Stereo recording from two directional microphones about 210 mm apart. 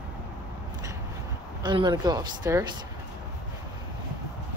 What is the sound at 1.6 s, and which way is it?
Speech, 20° right (ahead or behind).